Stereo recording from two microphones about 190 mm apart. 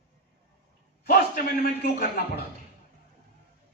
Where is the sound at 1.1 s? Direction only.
55° left (ahead or behind).